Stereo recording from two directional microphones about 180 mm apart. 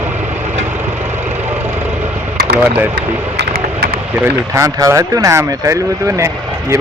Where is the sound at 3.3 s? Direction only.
55° right (ahead or behind).